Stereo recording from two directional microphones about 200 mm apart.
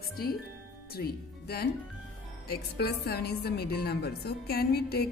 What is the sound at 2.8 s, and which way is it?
A woman's voice, 50° left (ahead or behind).